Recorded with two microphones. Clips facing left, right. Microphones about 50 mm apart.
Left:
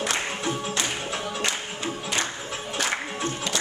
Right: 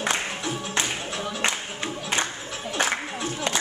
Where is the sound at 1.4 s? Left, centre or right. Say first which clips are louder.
Right 1 dB; right.